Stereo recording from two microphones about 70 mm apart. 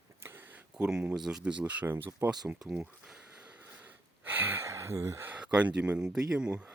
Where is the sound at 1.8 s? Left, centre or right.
Right.